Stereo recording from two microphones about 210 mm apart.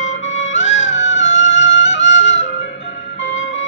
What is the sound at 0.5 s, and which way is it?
Music, 60° left (ahead or behind).